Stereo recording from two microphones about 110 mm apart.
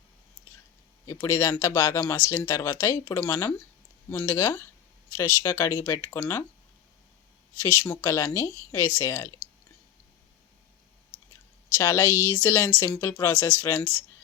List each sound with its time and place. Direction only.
1.0 s speech: 30° left (ahead or behind)
7.6 s speech: 20° left (ahead or behind)
11.8 s speech: 25° left (ahead or behind)